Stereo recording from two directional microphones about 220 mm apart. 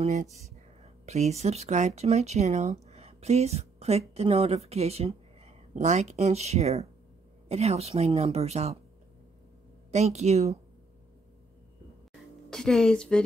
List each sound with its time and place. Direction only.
0.0 s speech: 30° right (ahead or behind)
9.8 s speech: 30° right (ahead or behind)
12.4 s speech: 5° left (ahead or behind)